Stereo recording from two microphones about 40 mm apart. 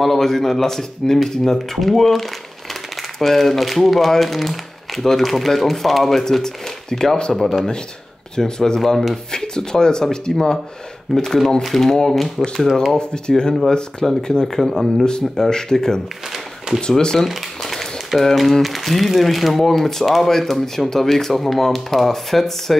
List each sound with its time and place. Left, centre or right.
0.0 s speech: centre
6.4 s speech: centre
11.1 s speech: centre
12.9 s speech: left
14.6 s speech: centre
15.0 s speech: centre
16.3 s a sound: centre
16.8 s speech: centre
17.3 s speech: centre